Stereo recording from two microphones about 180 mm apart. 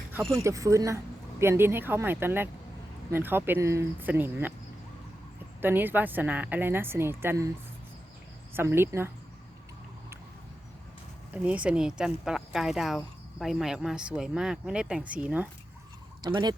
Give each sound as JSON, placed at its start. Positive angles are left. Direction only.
{"t": 0.4, "sound": "speech", "side_deg": -15}
{"t": 5.6, "sound": "speech", "side_deg": -10}
{"t": 8.5, "sound": "speech", "side_deg": -15}
{"t": 11.4, "sound": "speech", "side_deg": -5}
{"t": 16.2, "sound": "speech", "side_deg": -25}